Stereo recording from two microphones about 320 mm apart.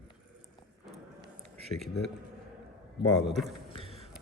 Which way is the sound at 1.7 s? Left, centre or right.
Centre.